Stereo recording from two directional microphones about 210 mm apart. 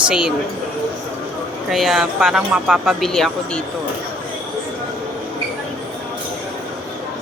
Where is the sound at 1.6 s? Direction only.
Centre (ahead or behind).